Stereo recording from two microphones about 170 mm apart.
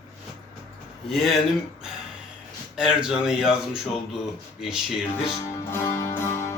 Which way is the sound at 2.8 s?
5° right (ahead or behind).